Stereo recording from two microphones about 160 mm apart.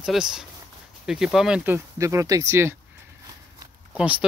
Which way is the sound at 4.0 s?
10° right (ahead or behind).